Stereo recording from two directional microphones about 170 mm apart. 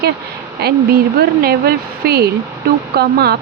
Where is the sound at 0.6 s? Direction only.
70° right (ahead or behind).